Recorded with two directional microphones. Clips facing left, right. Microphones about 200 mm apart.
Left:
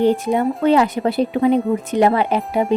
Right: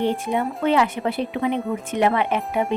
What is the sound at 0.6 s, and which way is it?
A child's voice, 40° left (ahead or behind).